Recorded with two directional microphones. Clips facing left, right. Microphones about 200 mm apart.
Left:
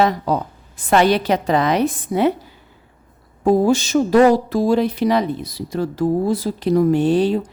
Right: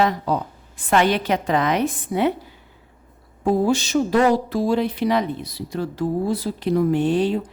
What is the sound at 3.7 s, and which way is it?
A woman's voice, 45° left (ahead or behind).